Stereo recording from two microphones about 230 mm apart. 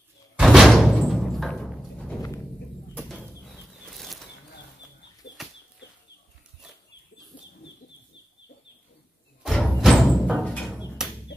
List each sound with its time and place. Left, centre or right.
0.4 s music: centre
2.9 s a sound: centre
5.2 s bird flight: left
9.4 s music: centre